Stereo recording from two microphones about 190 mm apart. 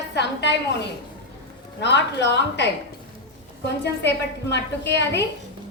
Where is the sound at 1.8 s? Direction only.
65° left (ahead or behind).